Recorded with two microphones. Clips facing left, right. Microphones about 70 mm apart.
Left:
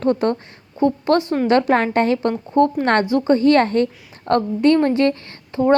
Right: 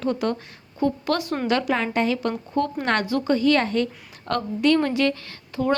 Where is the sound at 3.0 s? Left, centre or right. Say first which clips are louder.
Left 6 dB; left.